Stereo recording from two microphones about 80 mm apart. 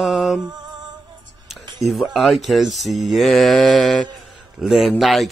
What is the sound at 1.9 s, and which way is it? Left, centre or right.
Mantra, centre.